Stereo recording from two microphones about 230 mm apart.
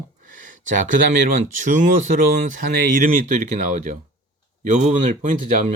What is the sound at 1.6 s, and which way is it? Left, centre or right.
Speech, right.